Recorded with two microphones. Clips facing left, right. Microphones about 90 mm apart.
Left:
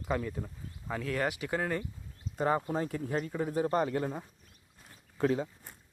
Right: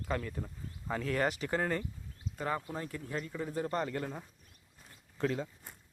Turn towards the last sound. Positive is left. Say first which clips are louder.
# left 4 dB
turn(degrees=10)  # may be behind; listen again after turning